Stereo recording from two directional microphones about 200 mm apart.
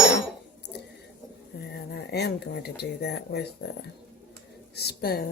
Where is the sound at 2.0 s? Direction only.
55° left (ahead or behind).